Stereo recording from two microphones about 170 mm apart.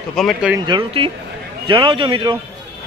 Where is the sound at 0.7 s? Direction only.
30° right (ahead or behind).